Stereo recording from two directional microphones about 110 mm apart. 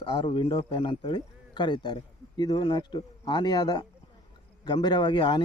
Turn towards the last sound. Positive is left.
turn(degrees=45)  # may be behind; listen again after turning